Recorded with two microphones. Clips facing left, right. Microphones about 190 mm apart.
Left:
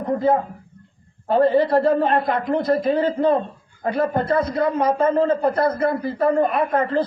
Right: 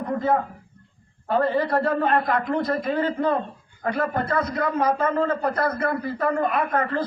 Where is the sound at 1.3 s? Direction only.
25° left (ahead or behind).